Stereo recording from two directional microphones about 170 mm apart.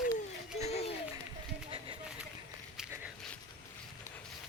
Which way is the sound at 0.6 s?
40° left (ahead or behind).